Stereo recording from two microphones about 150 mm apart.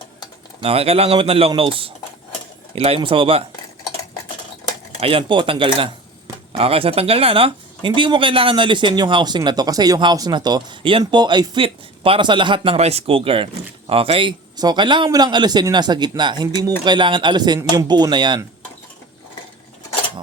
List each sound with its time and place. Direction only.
0.6 s speech: 40° right (ahead or behind)
4.9 s speech: 40° right (ahead or behind)